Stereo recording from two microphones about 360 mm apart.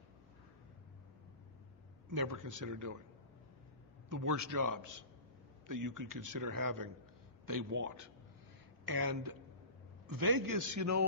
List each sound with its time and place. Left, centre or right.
2.0 s a man's voice: right
4.1 s a man's voice: right
8.8 s a man's voice: right